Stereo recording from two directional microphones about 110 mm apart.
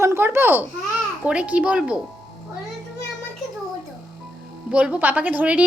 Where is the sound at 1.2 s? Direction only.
10° right (ahead or behind).